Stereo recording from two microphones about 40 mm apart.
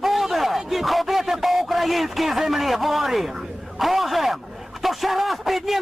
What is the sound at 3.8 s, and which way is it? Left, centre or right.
A man's voice, centre.